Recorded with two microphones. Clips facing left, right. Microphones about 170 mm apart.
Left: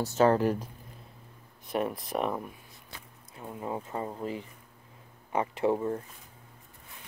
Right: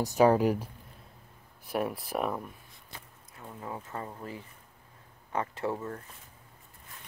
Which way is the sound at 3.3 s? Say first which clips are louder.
Left 5 dB; 20° left (ahead or behind).